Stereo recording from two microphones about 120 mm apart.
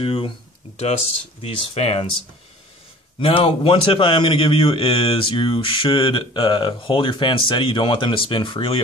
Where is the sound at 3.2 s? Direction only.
45° left (ahead or behind).